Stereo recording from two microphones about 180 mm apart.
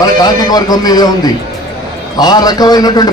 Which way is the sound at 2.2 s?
20° left (ahead or behind).